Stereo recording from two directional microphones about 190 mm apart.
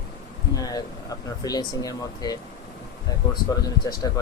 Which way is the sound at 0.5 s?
20° left (ahead or behind).